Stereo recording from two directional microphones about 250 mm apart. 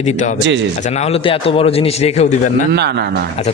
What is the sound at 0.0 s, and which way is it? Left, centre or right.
A man's voice, left.